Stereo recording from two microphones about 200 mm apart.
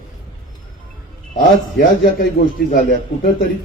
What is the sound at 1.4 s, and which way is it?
A man's voice, 50° left (ahead or behind).